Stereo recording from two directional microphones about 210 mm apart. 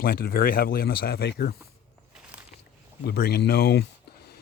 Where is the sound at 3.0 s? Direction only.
50° left (ahead or behind).